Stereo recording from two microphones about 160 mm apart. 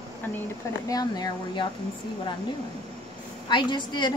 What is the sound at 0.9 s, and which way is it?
Speech, 25° left (ahead or behind).